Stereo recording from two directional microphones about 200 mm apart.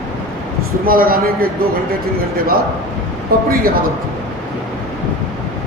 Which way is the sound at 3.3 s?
50° right (ahead or behind).